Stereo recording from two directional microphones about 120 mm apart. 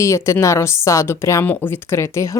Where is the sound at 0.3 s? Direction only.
25° left (ahead or behind).